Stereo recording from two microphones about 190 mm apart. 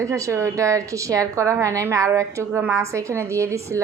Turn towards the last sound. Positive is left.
turn(degrees=-15)  # may be behind; listen again after turning